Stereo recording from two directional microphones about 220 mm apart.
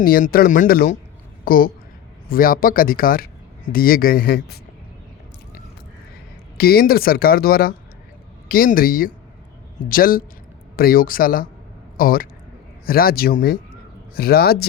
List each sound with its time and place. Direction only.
0.0 s speech: 40° left (ahead or behind)
6.6 s speech: 45° left (ahead or behind)